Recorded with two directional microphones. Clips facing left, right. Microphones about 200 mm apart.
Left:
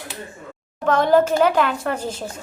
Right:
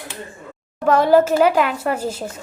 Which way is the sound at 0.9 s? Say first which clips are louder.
Right 2 dB; 10° right (ahead or behind).